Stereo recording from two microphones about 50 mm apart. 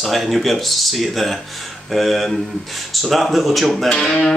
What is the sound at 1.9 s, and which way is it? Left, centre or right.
Speech, centre.